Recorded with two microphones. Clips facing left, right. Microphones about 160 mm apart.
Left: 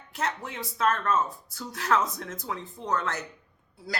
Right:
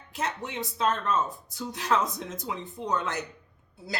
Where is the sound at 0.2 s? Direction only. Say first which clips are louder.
Even; 20° right (ahead or behind).